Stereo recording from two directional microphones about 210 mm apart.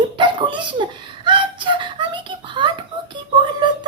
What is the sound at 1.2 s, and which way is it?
Whimper, 20° right (ahead or behind).